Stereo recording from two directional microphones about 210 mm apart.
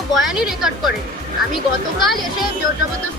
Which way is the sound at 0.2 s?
Centre (ahead or behind).